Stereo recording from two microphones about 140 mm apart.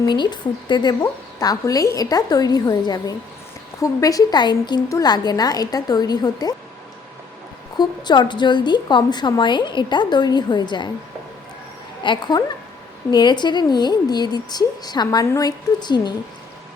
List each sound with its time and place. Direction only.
0.1 s a woman's voice: 35° left (ahead or behind)
7.8 s a woman's voice: 30° left (ahead or behind)
12.0 s a woman's voice: 35° left (ahead or behind)